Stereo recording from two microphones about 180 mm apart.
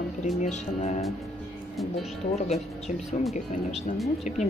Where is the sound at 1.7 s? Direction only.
Centre (ahead or behind).